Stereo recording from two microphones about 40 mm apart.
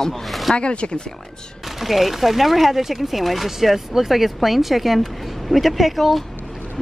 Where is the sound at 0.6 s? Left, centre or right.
Left.